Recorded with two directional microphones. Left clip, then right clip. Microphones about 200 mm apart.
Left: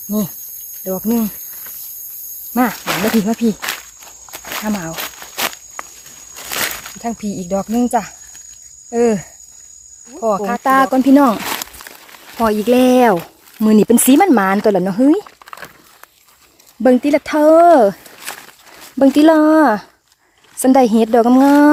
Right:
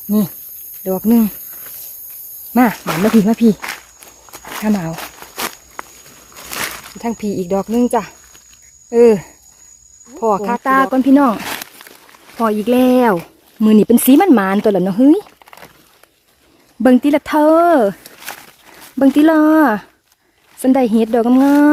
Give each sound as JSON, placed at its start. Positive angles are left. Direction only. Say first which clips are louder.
{"t": 0.9, "sound": "speech", "louder": "right 4 dB", "side_deg": -40}
{"t": 2.5, "sound": "speech", "louder": "right 3 dB", "side_deg": -45}
{"t": 2.8, "sound": "speech", "louder": "right 1 dB", "side_deg": 10}
{"t": 3.4, "sound": "speech", "louder": "right 4 dB", "side_deg": -45}
{"t": 4.0, "sound": "walk", "louder": "left 2 dB", "side_deg": 5}
{"t": 5.8, "sound": "walk", "louder": "even", "side_deg": 15}
{"t": 6.3, "sound": "a sound", "louder": "left 3 dB", "side_deg": 0}
{"t": 7.0, "sound": "speech", "louder": "right 4 dB", "side_deg": -45}
{"t": 10.6, "sound": "speech", "louder": "left 4 dB", "side_deg": 0}
{"t": 11.3, "sound": "a sound", "louder": "left 2 dB", "side_deg": 15}
{"t": 12.4, "sound": "speech", "louder": "left 1 dB", "side_deg": 0}
{"t": 16.8, "sound": "speech", "louder": "even", "side_deg": -10}